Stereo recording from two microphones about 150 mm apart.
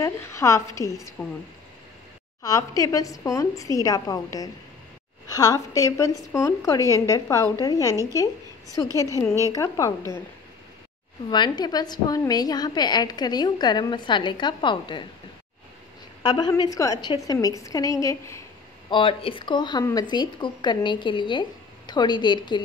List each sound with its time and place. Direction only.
0.0 s a woman's voice: 20° left (ahead or behind)
2.4 s a woman's voice: 25° left (ahead or behind)
11.2 s a woman's voice: 30° left (ahead or behind)
16.2 s a woman's voice: 30° left (ahead or behind)
18.9 s a woman's voice: 35° left (ahead or behind)